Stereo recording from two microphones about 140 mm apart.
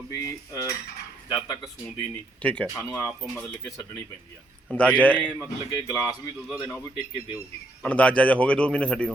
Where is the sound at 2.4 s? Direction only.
10° left (ahead or behind).